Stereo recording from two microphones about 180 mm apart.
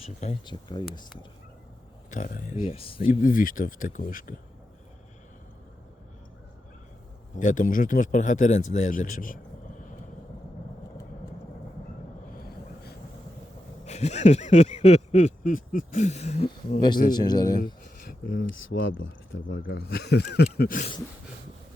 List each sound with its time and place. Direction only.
0.0 s a sound: 35° left (ahead or behind)
0.4 s speech: 25° left (ahead or behind)
2.0 s speech: 45° left (ahead or behind)
2.6 s a sound: 30° left (ahead or behind)
3.0 s speech: 50° left (ahead or behind)
7.3 s speech: 45° left (ahead or behind)
13.8 s a sound: 40° left (ahead or behind)
17.1 s speech: 25° left (ahead or behind)
18.0 s speech: 55° left (ahead or behind)
18.7 s speech: 90° left
19.5 s speech: 75° left (ahead or behind); by 20.9 s 50° left (ahead or behind)